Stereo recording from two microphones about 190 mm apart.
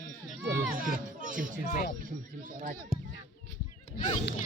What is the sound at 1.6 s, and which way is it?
Music, 45° left (ahead or behind).